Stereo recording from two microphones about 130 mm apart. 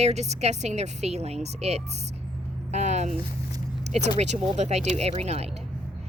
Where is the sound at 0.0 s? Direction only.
55° right (ahead or behind).